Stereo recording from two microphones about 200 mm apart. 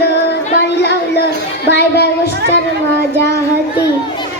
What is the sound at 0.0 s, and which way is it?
Music, 55° left (ahead or behind).